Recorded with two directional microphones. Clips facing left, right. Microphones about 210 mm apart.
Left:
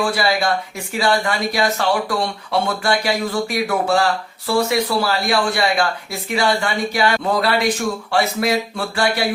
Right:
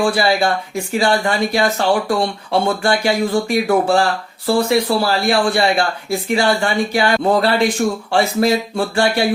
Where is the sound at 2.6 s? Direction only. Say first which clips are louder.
Right 4 dB; 25° right (ahead or behind).